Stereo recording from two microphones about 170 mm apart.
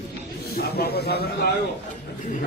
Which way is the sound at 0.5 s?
70° left (ahead or behind).